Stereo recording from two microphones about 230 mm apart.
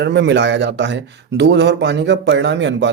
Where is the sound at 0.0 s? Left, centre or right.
Right.